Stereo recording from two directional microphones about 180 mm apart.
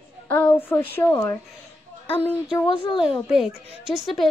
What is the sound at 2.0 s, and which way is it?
A child's voice, 30° left (ahead or behind).